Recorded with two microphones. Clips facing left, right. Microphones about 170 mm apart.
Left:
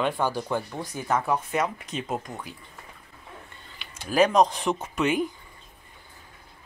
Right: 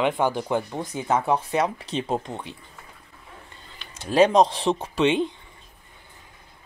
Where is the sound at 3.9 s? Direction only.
30° right (ahead or behind).